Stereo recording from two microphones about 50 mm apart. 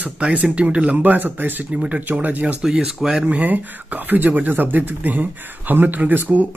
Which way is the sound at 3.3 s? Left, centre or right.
Right.